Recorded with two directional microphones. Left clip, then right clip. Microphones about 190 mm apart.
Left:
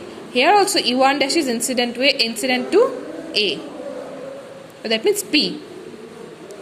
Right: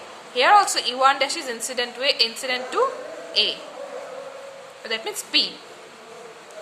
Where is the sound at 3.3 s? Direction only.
15° left (ahead or behind).